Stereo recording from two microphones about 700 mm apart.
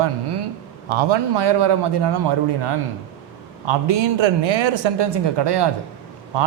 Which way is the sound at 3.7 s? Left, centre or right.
Right.